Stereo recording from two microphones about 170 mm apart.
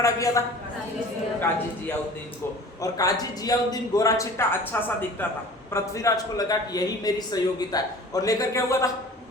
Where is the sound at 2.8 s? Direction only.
20° left (ahead or behind).